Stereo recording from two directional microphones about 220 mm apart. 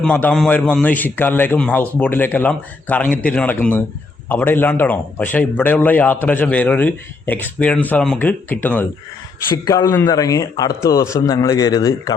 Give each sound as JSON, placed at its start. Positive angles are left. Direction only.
{"t": 0.0, "sound": "a man's voice", "side_deg": 5}